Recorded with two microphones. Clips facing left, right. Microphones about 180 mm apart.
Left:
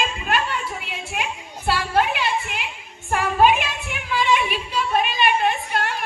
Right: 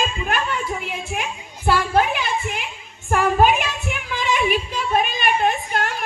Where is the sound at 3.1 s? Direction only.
45° right (ahead or behind).